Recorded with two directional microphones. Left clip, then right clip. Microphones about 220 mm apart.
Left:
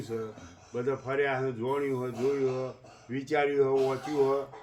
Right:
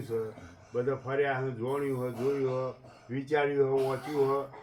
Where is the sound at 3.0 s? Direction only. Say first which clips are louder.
Left 1 dB; 50° left (ahead or behind).